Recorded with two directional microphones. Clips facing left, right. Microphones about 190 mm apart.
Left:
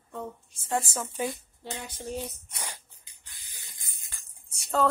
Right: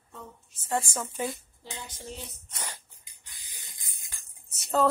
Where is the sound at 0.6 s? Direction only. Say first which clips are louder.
Even; 10° left (ahead or behind).